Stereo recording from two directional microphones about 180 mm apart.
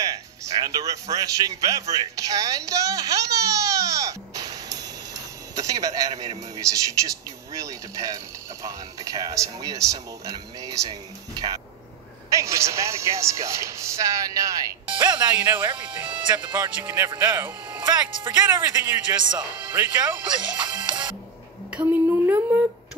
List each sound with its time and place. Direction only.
0.0 s speech: 20° right (ahead or behind)
17.8 s speech: 25° right (ahead or behind)
18.5 s speech: 10° right (ahead or behind)
20.7 s music: 25° right (ahead or behind)
21.7 s a sound: 10° right (ahead or behind)